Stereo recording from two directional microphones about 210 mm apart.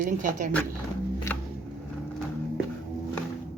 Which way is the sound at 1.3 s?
10° left (ahead or behind).